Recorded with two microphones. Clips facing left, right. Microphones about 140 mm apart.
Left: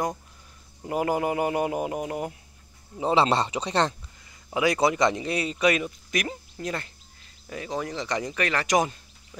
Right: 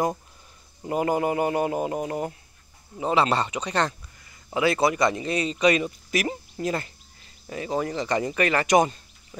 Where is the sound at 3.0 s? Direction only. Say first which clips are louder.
Even; 25° left (ahead or behind).